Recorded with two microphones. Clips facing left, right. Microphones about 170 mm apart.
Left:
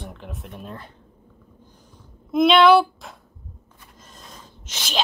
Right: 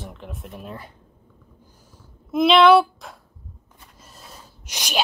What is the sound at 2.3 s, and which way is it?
Speech, centre (ahead or behind).